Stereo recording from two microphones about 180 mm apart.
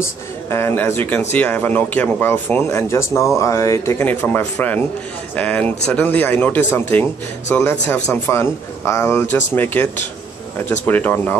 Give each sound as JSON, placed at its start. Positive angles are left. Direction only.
{"t": 0.0, "sound": "a man's voice", "side_deg": 15}